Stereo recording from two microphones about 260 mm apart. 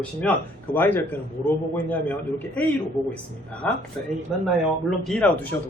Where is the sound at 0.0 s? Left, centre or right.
Centre.